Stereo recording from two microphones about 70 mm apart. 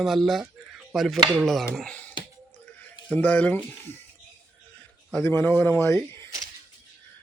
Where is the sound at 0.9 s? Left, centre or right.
Centre.